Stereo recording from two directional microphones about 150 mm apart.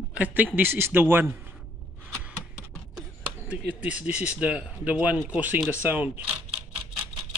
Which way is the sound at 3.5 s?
10° right (ahead or behind).